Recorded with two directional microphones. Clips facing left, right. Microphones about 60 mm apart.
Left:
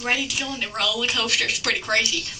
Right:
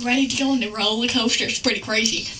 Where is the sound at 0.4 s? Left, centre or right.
Centre.